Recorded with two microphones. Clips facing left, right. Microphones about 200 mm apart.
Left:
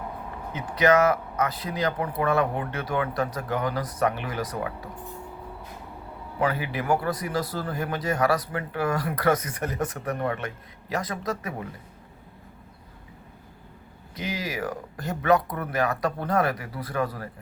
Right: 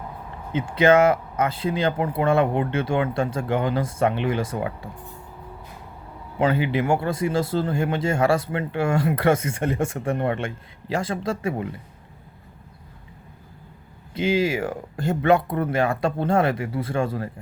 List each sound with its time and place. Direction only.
0.5 s speech: 25° right (ahead or behind)
6.4 s speech: 25° right (ahead or behind)
14.1 s speech: 25° right (ahead or behind)